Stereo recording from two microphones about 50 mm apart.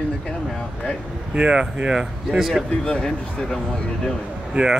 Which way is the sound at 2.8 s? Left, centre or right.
Centre.